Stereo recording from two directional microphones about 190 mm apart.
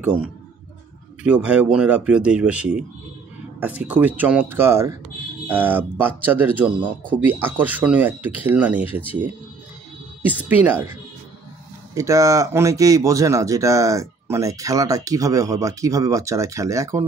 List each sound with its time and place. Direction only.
1.2 s speech: 5° right (ahead or behind)